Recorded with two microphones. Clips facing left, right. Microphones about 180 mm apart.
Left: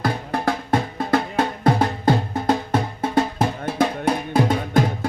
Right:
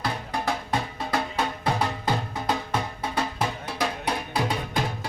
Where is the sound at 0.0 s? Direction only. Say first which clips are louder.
Left 6 dB; 50° left (ahead or behind).